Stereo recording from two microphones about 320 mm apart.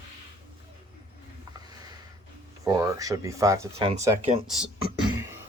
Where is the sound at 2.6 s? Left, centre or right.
Centre.